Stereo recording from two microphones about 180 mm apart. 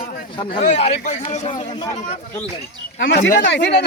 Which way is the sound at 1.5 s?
25° left (ahead or behind).